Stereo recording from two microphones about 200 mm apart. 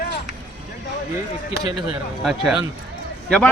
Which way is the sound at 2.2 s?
Centre (ahead or behind).